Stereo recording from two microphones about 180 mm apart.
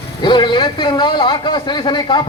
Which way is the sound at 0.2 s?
25° left (ahead or behind).